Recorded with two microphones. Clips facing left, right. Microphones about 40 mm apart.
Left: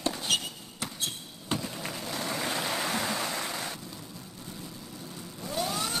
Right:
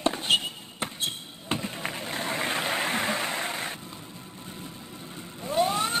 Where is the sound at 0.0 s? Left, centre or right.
Right.